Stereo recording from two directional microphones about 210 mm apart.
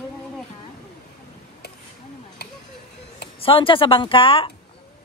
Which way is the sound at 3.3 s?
25° left (ahead or behind).